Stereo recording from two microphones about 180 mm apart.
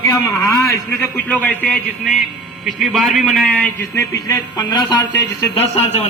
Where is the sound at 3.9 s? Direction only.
15° left (ahead or behind).